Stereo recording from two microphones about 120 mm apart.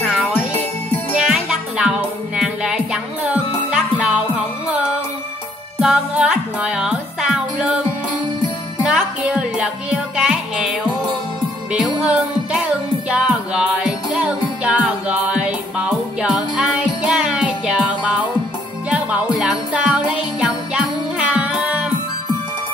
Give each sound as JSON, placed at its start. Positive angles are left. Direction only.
{"t": 0.3, "sound": "jingle bell", "side_deg": 20}
{"t": 1.2, "sound": "music", "side_deg": -5}
{"t": 8.8, "sound": "music", "side_deg": -10}
{"t": 18.9, "sound": "jingle bell", "side_deg": -10}